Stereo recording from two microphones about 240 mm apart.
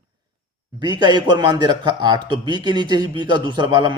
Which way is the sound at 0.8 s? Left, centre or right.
Centre.